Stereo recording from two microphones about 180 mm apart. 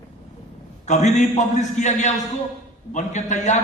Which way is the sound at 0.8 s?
40° left (ahead or behind).